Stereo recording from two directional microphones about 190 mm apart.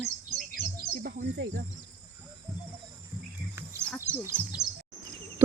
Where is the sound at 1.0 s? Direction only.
55° right (ahead or behind).